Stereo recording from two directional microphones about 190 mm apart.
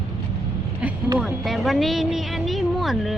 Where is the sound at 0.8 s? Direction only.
10° right (ahead or behind).